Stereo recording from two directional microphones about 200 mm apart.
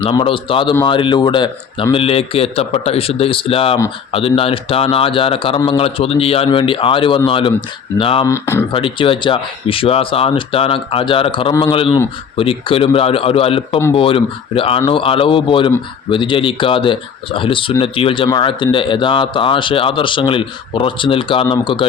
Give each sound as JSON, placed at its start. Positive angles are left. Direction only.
{"t": 0.0, "sound": "speech", "side_deg": 25}
{"t": 8.3, "sound": "speech", "side_deg": 10}
{"t": 8.7, "sound": "speech", "side_deg": 25}